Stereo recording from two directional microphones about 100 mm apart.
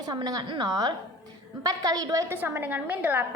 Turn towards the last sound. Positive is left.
turn(degrees=-15)  # may be behind; listen again after turning